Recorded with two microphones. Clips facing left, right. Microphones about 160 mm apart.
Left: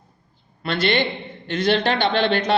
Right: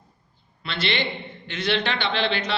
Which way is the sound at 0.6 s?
45° left (ahead or behind).